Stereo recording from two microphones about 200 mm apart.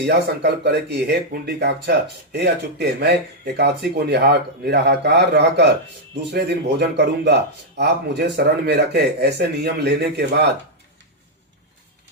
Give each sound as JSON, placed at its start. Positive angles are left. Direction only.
{"t": 0.0, "sound": "speech", "side_deg": -55}